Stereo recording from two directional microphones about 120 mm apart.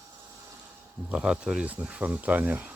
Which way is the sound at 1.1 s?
5° right (ahead or behind).